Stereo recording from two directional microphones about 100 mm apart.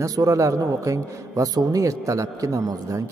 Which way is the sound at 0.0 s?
35° right (ahead or behind).